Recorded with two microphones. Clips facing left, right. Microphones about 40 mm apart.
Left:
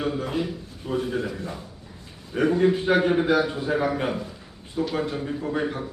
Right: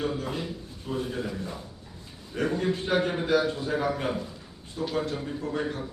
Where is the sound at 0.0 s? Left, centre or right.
Centre.